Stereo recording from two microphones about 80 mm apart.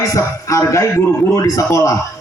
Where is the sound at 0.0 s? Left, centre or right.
Left.